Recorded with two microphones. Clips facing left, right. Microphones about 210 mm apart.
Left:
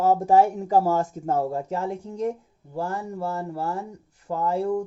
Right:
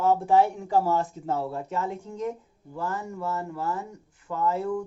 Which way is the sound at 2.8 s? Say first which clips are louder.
Left 3 dB; 35° left (ahead or behind).